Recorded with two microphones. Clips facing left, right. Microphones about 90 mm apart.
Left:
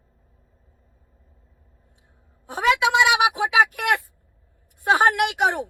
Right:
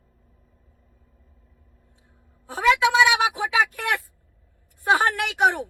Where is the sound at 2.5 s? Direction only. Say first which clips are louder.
Even; 20° left (ahead or behind).